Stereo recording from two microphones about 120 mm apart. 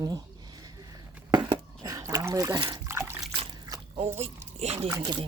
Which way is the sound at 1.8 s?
30° right (ahead or behind).